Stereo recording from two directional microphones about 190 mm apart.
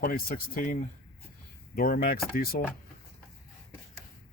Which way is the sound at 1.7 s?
50° left (ahead or behind).